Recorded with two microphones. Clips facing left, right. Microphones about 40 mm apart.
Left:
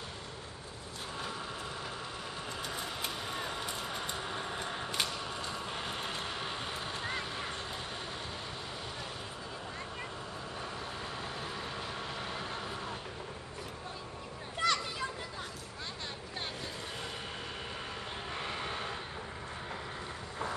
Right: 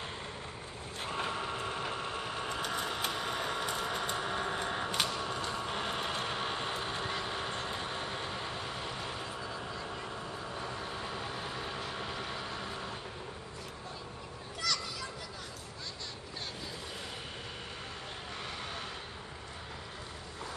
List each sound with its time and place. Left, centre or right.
1.0 s vehicle: right
3.1 s a sound: right
5.5 s vehicle: right
7.2 s vehicle: right
10.5 s vehicle: centre
14.6 s children playing: left
18.3 s vehicle: left